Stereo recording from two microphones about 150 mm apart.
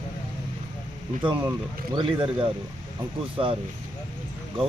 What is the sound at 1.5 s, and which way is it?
Speech, 30° right (ahead or behind).